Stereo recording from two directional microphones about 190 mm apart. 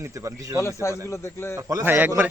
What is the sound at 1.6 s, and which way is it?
Speech, 15° right (ahead or behind).